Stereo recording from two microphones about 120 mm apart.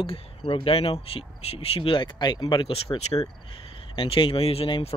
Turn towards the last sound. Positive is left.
turn(degrees=50)  # may be behind; listen again after turning